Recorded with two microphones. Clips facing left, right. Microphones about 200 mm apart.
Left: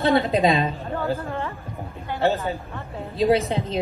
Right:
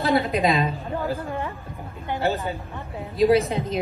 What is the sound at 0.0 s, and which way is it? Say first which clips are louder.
Speech: left 2 dB; 30° left (ahead or behind).